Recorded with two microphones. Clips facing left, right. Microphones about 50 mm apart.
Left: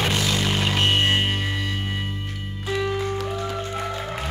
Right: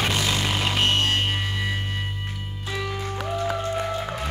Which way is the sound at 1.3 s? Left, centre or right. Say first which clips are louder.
Left 1 dB; centre.